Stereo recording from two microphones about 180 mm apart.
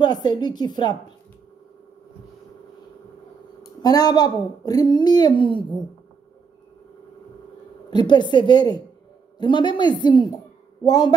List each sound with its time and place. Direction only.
0.0 s speech: 20° left (ahead or behind)
3.8 s speech: 20° left (ahead or behind)
7.9 s a woman's voice: 25° left (ahead or behind)